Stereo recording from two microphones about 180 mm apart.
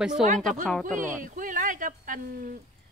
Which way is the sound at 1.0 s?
45° right (ahead or behind).